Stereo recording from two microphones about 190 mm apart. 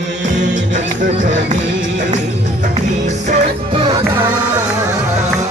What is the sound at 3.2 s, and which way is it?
Music, 35° right (ahead or behind).